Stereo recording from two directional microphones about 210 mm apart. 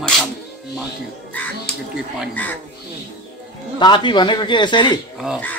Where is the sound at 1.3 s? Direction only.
10° left (ahead or behind).